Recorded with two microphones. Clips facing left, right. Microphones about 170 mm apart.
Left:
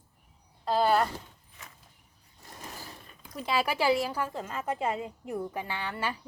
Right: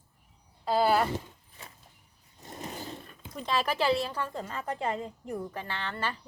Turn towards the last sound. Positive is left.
turn(degrees=10)  # may be behind; listen again after turning